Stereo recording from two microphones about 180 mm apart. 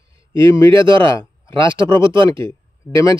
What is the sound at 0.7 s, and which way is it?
Speech, 30° right (ahead or behind).